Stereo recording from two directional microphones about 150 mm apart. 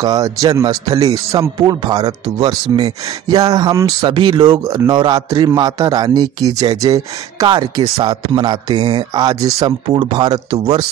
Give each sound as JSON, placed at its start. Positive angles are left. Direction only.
{"t": 0.0, "sound": "a man's voice", "side_deg": -25}